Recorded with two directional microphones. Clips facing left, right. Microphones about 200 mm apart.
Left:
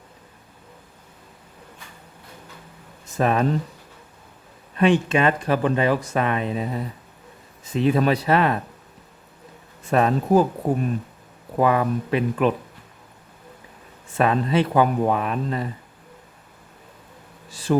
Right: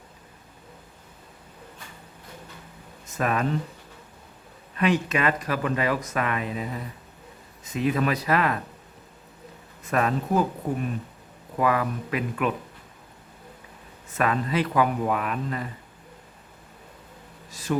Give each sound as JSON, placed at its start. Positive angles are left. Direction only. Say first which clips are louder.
{"t": 3.2, "sound": "speech", "louder": "left 5 dB", "side_deg": 30}
{"t": 4.8, "sound": "speech", "louder": "left 5 dB", "side_deg": 30}
{"t": 9.8, "sound": "speech", "louder": "left 5 dB", "side_deg": 30}
{"t": 11.5, "sound": "speech", "louder": "left 4 dB", "side_deg": 30}
{"t": 14.2, "sound": "speech", "louder": "left 5 dB", "side_deg": 25}
{"t": 17.5, "sound": "speech", "louder": "left 5 dB", "side_deg": 30}